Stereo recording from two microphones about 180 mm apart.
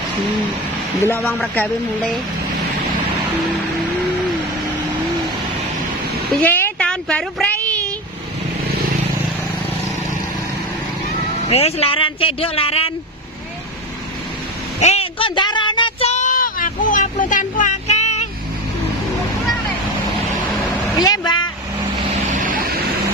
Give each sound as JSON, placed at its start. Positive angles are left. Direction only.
{"t": 1.5, "sound": "a woman's voice", "side_deg": 5}
{"t": 6.3, "sound": "a sound", "side_deg": 10}
{"t": 11.5, "sound": "speech", "side_deg": 35}
{"t": 14.8, "sound": "a sound", "side_deg": 35}
{"t": 21.0, "sound": "vehicle", "side_deg": 20}
{"t": 22.4, "sound": "vehicle", "side_deg": -50}